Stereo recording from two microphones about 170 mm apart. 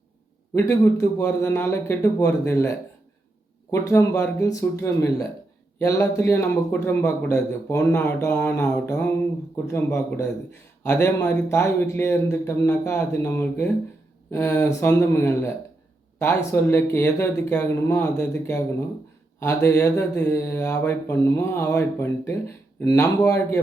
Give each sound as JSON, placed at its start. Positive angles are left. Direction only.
{"t": 0.5, "sound": "speech", "side_deg": 15}